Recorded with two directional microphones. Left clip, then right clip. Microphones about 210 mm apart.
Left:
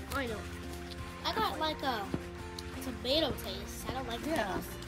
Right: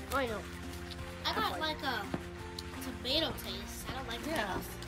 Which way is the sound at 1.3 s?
10° left (ahead or behind).